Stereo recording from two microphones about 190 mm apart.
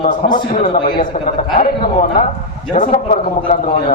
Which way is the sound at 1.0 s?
40° left (ahead or behind).